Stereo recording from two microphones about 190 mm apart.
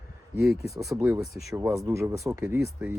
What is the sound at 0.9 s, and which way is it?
Speech, 10° right (ahead or behind).